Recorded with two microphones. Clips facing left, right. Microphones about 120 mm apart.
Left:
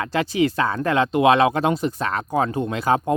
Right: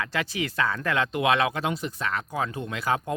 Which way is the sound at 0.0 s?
30° left (ahead or behind).